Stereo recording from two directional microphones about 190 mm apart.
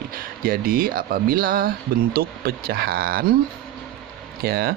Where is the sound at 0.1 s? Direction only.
50° right (ahead or behind).